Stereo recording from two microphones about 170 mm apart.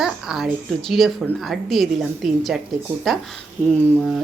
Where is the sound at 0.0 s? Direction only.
5° right (ahead or behind).